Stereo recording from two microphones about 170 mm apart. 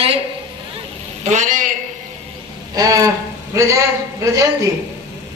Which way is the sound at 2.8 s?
20° right (ahead or behind).